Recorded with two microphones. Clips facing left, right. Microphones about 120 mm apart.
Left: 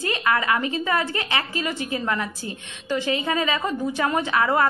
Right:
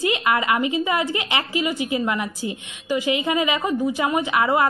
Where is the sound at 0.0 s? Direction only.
15° right (ahead or behind).